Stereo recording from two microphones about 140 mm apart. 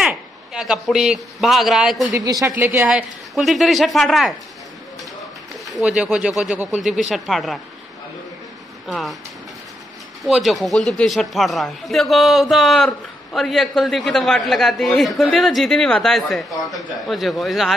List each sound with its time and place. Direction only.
0.0 s a man's voice: 5° right (ahead or behind)
2.1 s speech: 25° right (ahead or behind)
2.6 s a man's voice: 15° right (ahead or behind)
5.8 s a man's voice: 5° right (ahead or behind)
8.8 s speech: centre (ahead or behind)
10.2 s a man's voice: centre (ahead or behind)